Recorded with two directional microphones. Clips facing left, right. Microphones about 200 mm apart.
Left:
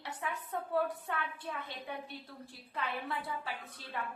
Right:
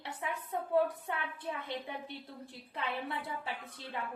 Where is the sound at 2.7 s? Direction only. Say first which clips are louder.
Even; 20° right (ahead or behind).